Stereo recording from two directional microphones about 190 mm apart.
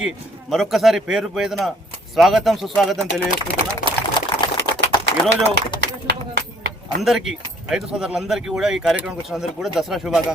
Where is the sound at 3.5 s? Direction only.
50° left (ahead or behind).